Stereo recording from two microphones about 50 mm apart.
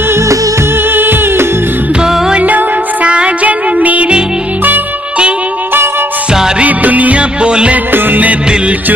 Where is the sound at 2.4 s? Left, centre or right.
Right.